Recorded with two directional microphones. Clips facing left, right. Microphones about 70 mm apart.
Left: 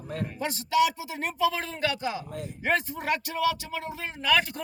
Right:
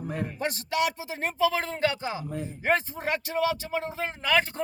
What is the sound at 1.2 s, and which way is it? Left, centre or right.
Speech, right.